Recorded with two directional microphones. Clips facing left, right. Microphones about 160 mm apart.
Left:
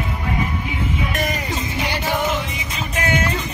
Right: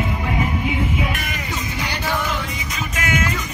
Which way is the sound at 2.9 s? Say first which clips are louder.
Left 2 dB; 35° left (ahead or behind).